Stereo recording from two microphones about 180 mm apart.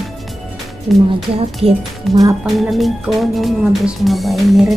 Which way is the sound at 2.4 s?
Centre (ahead or behind).